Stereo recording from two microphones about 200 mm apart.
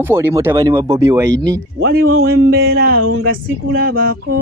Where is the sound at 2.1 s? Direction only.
50° right (ahead or behind).